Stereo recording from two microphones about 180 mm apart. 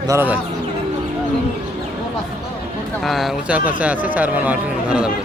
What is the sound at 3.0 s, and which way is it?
Speech, centre (ahead or behind).